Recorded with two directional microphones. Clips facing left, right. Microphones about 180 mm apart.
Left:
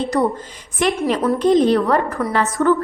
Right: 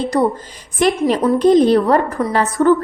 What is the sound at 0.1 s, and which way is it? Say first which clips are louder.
Speech: right 3 dB; 35° right (ahead or behind).